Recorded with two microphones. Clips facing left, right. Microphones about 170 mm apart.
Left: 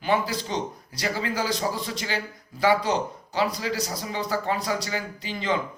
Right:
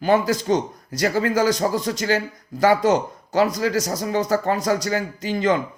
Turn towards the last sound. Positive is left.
turn(degrees=-45)  # may be behind; listen again after turning